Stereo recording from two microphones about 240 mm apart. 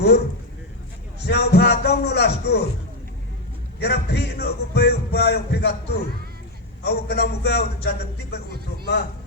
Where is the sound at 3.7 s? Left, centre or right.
Left.